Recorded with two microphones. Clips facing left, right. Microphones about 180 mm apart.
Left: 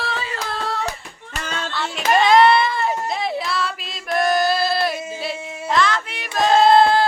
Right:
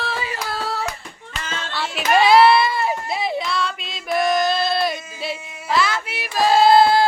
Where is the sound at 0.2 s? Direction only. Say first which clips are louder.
Even; 10° right (ahead or behind).